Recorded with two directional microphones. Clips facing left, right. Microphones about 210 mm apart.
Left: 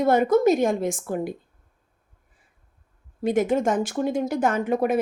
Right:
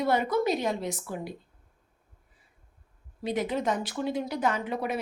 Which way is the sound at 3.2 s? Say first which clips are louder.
Left 8 dB; 50° left (ahead or behind).